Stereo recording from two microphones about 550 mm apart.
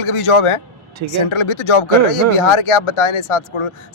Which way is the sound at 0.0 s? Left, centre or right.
Left.